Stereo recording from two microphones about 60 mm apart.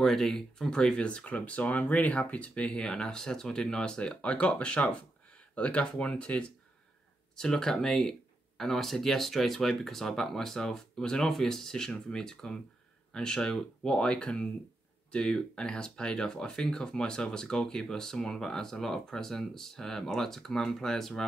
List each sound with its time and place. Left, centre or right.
0.0 s speech: centre